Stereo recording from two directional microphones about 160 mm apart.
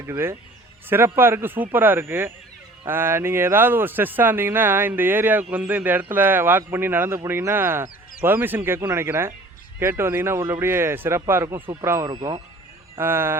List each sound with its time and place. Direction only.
0.0 s speech: 15° right (ahead or behind)
11.6 s speech: 35° right (ahead or behind)
11.9 s speech: 20° right (ahead or behind)